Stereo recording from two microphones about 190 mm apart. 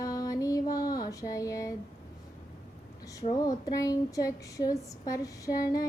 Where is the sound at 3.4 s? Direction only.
20° left (ahead or behind).